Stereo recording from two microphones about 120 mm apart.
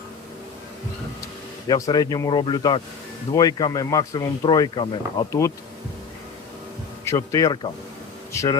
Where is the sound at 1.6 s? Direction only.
35° left (ahead or behind).